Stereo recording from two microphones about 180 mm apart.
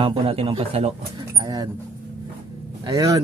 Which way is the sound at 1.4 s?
20° right (ahead or behind).